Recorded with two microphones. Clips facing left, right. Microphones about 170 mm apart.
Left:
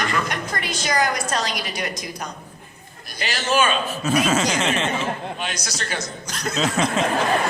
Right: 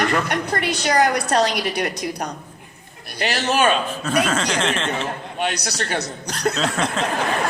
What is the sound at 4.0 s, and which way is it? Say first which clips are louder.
Speech: left 5 dB; 5° left (ahead or behind).